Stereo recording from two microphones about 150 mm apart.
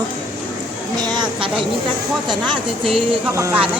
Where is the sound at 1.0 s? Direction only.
30° right (ahead or behind).